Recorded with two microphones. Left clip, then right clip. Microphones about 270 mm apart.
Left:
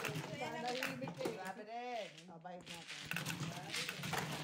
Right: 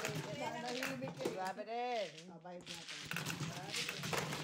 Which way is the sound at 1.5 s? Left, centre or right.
Right.